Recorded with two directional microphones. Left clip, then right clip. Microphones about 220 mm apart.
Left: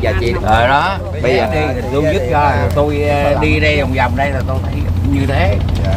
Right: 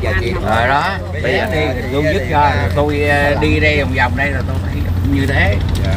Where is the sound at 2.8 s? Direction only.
15° left (ahead or behind).